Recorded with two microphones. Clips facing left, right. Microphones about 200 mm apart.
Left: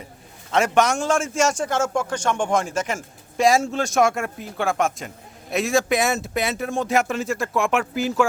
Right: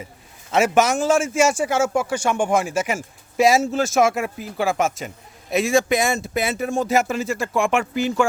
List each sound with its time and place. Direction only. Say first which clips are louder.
0.5 s a man's voice: right 2 dB; 5° right (ahead or behind)